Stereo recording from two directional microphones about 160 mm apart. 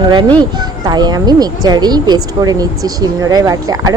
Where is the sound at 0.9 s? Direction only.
25° right (ahead or behind).